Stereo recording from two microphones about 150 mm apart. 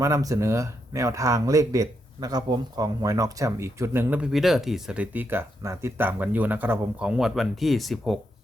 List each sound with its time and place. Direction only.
0.0 s speech: 20° right (ahead or behind); by 8.2 s centre (ahead or behind)